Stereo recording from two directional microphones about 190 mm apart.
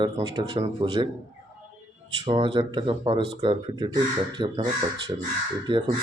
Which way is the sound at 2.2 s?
25° right (ahead or behind).